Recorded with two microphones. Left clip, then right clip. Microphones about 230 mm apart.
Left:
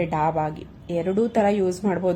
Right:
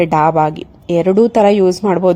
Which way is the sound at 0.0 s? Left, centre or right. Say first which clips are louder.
Right 11 dB; right.